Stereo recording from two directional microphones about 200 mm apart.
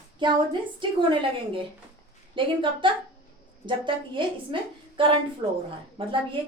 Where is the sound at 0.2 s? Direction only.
25° right (ahead or behind).